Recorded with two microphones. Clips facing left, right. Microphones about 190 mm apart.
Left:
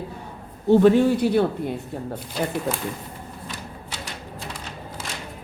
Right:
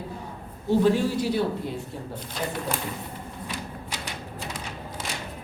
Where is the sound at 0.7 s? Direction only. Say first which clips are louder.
Left 6 dB; 60° left (ahead or behind).